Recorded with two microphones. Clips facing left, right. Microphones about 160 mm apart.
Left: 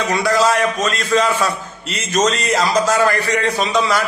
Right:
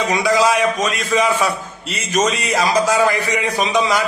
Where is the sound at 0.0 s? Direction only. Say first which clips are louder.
Even; 15° right (ahead or behind).